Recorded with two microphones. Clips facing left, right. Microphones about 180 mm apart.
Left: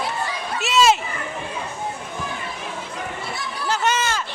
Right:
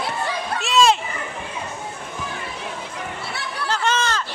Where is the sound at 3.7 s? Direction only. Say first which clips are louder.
Even; 10° left (ahead or behind).